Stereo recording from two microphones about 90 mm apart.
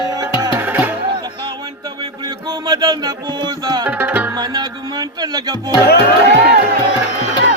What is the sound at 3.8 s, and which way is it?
Tabla, 15° right (ahead or behind).